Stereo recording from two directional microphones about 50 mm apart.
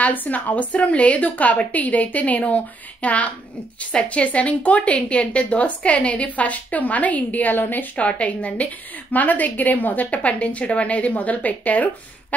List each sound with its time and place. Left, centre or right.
0.0 s a woman's voice: left